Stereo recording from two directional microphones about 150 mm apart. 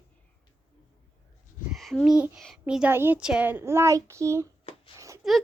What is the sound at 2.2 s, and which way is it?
A woman's voice, centre (ahead or behind).